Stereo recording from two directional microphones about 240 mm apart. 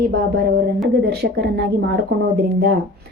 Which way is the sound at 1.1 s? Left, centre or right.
Right.